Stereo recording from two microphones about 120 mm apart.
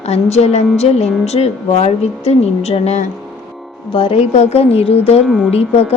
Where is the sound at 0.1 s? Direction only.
65° left (ahead or behind).